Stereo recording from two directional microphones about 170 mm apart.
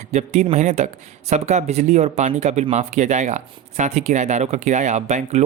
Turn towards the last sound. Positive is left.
turn(degrees=-40)  # may be behind; listen again after turning